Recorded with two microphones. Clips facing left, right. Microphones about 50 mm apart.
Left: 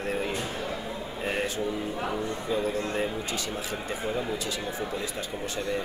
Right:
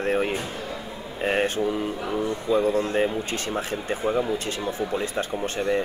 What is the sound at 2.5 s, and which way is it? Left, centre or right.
Speech, right.